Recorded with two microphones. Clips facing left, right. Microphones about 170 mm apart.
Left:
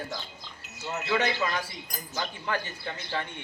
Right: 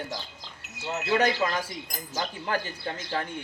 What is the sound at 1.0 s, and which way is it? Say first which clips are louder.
Speech: right 3 dB; 40° right (ahead or behind).